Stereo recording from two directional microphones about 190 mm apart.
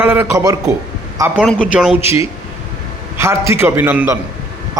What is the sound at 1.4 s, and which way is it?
Speech, 5° right (ahead or behind).